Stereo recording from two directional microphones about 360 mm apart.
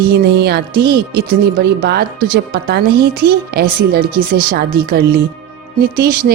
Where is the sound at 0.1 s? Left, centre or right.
Right.